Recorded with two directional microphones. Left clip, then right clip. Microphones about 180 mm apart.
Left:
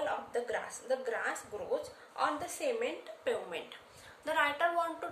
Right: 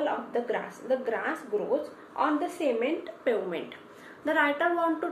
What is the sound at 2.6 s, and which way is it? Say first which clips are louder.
Speech: right 6 dB; 35° left (ahead or behind).